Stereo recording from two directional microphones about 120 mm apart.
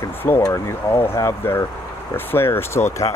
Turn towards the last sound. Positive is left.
turn(degrees=20)  # may be behind; listen again after turning